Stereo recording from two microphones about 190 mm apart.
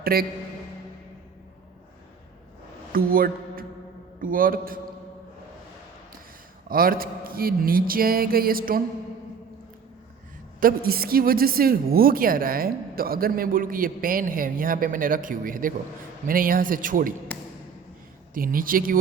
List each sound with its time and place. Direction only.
0.0 s a man's voice: 50° right (ahead or behind)
2.9 s a man's voice: 50° right (ahead or behind)
6.7 s a woman's voice: 50° right (ahead or behind)
10.6 s a woman's voice: 50° right (ahead or behind)
18.3 s a woman's voice: 50° right (ahead or behind)